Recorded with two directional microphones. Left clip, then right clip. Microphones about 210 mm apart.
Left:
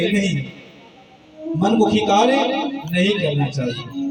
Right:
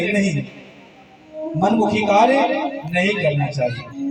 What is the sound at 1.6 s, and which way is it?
A man's voice, 50° left (ahead or behind).